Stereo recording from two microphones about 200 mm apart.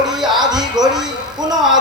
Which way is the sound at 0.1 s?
Centre (ahead or behind).